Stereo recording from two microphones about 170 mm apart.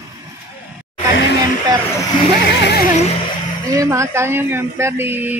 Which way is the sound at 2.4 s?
70° left (ahead or behind).